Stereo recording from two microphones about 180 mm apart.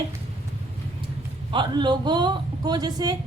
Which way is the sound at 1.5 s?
25° right (ahead or behind).